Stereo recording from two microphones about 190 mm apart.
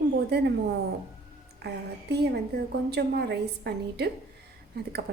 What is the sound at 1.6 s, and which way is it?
Speech, 60° right (ahead or behind).